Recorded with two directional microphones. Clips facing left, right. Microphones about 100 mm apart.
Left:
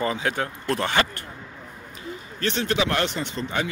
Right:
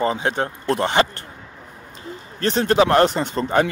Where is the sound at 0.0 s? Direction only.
30° right (ahead or behind).